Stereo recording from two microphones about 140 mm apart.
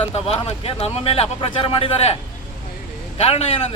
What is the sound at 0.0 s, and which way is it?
Speech, 40° left (ahead or behind).